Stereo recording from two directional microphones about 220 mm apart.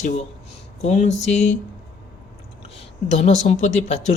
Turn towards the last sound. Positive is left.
turn(degrees=30)  # may be behind; listen again after turning